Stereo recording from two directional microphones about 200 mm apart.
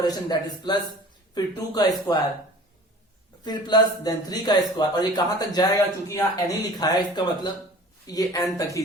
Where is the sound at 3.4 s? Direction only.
20° left (ahead or behind).